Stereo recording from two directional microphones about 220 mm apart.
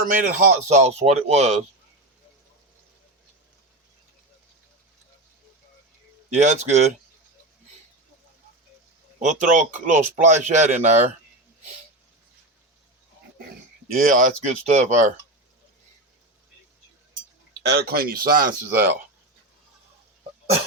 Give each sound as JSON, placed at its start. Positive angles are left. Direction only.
{"t": 0.0, "sound": "speech", "side_deg": -35}
{"t": 6.4, "sound": "speech", "side_deg": -30}
{"t": 9.1, "sound": "speech", "side_deg": -35}
{"t": 13.5, "sound": "speech", "side_deg": -40}
{"t": 17.6, "sound": "speech", "side_deg": -45}